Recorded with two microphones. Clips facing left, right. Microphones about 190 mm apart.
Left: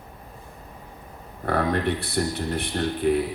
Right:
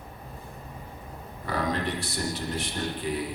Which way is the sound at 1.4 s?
60° left (ahead or behind).